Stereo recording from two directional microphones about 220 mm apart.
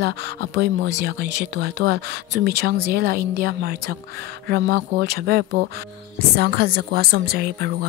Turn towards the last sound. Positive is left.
turn(degrees=-45)  # may be behind; listen again after turning